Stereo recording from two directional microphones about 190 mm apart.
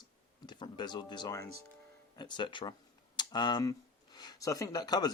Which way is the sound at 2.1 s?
25° left (ahead or behind).